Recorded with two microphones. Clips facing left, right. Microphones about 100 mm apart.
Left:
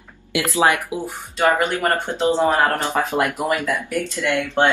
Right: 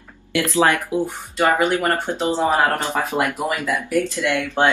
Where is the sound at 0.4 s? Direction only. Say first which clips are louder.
Even; 15° left (ahead or behind).